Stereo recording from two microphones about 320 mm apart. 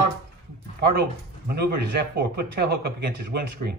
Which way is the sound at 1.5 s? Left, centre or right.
Right.